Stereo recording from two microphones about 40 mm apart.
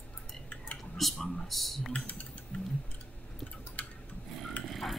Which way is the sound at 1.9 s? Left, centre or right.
Left.